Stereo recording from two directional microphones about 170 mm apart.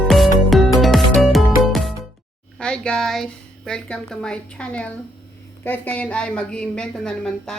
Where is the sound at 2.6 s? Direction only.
5° left (ahead or behind).